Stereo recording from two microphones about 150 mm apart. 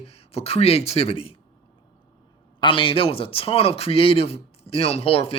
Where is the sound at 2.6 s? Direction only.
35° left (ahead or behind).